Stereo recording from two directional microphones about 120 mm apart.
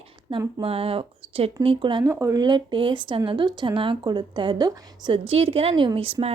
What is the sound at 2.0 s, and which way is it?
Speech, 25° right (ahead or behind).